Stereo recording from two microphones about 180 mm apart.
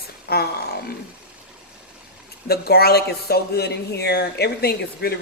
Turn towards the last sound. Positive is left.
turn(degrees=60)  # may be behind; listen again after turning